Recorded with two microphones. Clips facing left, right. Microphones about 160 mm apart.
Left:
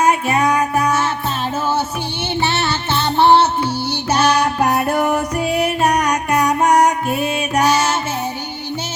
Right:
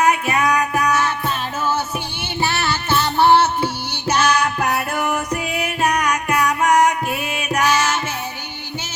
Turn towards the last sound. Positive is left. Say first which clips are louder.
# left 3 dB
turn(degrees=30)  # may be behind; listen again after turning